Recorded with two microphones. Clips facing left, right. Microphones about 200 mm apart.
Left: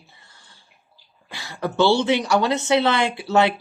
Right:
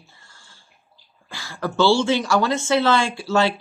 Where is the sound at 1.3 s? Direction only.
20° left (ahead or behind).